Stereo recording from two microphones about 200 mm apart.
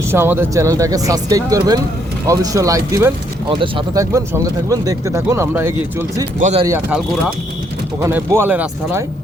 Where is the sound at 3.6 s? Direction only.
25° right (ahead or behind).